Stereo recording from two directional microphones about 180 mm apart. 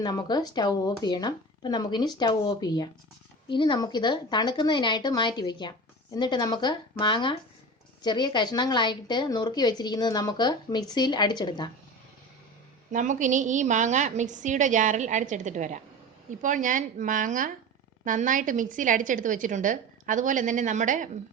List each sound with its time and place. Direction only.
0.0 s a woman's voice: 20° left (ahead or behind)
12.9 s a woman's voice: 45° right (ahead or behind)